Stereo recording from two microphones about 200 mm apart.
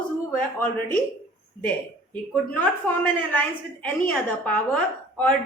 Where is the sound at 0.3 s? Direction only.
10° left (ahead or behind).